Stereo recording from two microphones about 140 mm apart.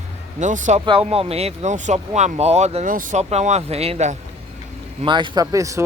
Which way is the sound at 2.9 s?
70° right (ahead or behind).